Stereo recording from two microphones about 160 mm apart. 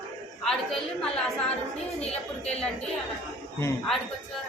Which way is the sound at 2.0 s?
40° left (ahead or behind).